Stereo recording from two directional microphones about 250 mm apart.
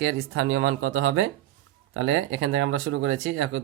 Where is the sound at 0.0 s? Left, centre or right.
Right.